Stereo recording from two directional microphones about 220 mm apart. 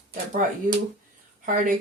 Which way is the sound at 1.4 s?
35° right (ahead or behind).